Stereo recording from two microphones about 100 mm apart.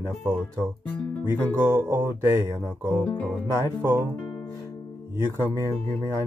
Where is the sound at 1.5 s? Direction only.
25° right (ahead or behind).